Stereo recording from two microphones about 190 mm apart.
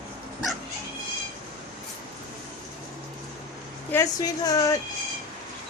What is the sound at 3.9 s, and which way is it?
Speech, 20° left (ahead or behind).